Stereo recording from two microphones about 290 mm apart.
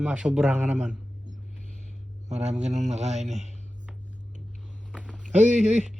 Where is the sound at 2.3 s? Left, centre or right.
Right.